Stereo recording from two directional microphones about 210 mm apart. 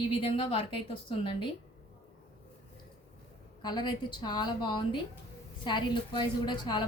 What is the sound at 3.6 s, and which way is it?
A woman's voice, 20° left (ahead or behind).